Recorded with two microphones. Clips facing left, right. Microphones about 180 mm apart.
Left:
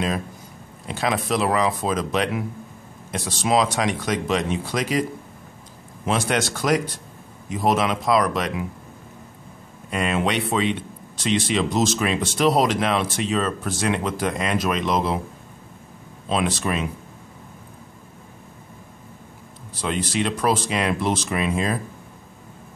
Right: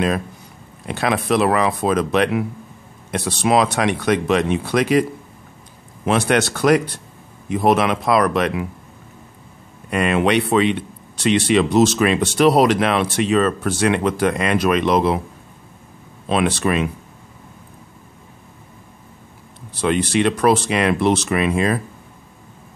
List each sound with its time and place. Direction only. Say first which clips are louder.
0.8 s speech: right 4 dB; 65° right (ahead or behind)
6.0 s speech: right 5 dB; 65° right (ahead or behind)
9.8 s speech: right 5 dB; 65° right (ahead or behind)
16.3 s speech: right 5 dB; 65° right (ahead or behind)
19.7 s speech: right 7 dB; 65° right (ahead or behind)